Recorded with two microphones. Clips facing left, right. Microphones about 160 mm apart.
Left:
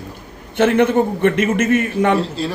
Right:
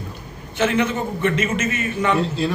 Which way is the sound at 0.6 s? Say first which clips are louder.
Left 6 dB; 55° left (ahead or behind).